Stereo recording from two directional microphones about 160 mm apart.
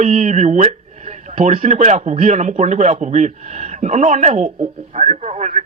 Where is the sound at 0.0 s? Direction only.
50° right (ahead or behind).